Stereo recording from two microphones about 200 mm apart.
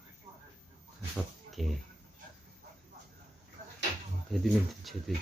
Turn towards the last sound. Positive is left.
turn(degrees=0)  # may be behind; listen again after turning